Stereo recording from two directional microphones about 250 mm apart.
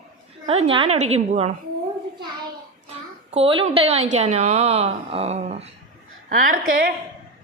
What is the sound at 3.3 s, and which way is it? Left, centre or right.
A woman's voice, right.